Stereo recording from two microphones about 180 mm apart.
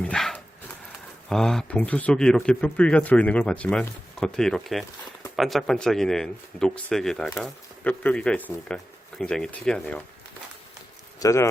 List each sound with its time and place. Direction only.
0.0 s a sound: 5° left (ahead or behind)
1.3 s speech: 5° left (ahead or behind)
11.2 s speech: 15° left (ahead or behind)